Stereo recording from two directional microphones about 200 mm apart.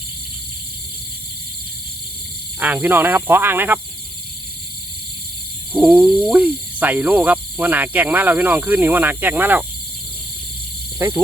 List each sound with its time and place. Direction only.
2.6 s speech: 10° right (ahead or behind)
5.7 s speech: 5° right (ahead or behind)
10.9 s speech: 15° right (ahead or behind)